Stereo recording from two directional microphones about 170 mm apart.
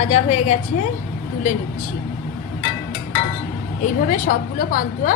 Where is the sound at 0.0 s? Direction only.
40° left (ahead or behind).